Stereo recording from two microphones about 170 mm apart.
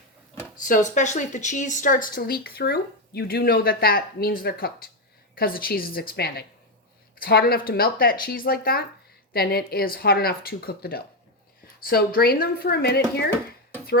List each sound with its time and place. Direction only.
0.6 s speech: 50° left (ahead or behind); by 13.2 s 70° left (ahead or behind)